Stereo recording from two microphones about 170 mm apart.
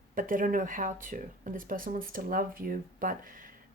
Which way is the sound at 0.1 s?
50° right (ahead or behind).